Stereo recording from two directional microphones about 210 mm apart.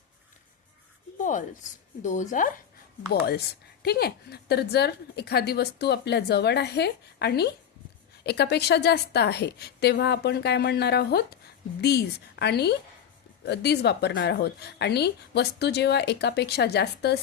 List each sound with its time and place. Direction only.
1.2 s speech: 35° left (ahead or behind)
3.1 s speech: 50° left (ahead or behind)